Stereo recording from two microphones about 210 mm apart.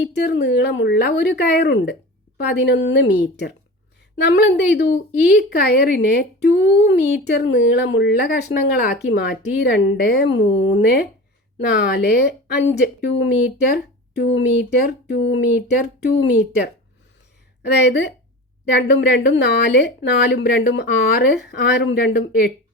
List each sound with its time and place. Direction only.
0.0 s speech: 50° left (ahead or behind)
17.7 s speech: 55° left (ahead or behind)